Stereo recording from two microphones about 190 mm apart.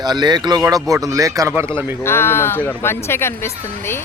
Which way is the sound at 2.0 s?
10° left (ahead or behind).